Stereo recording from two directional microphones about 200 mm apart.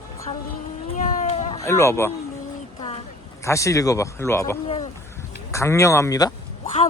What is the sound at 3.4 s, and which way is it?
Speech, 15° left (ahead or behind).